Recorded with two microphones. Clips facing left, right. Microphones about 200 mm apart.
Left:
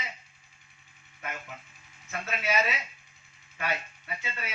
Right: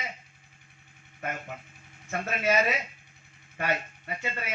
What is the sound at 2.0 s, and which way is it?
Speech, 50° right (ahead or behind).